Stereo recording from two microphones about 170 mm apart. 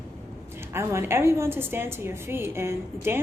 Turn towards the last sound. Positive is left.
turn(degrees=-15)  # may be behind; listen again after turning